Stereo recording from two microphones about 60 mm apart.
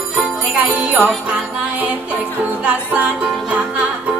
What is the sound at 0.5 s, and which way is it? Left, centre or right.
Music, right.